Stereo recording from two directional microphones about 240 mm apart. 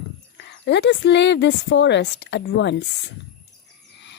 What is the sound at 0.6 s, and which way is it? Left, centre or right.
Speech, left.